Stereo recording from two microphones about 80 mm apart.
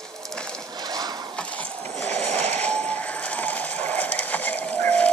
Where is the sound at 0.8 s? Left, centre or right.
Right.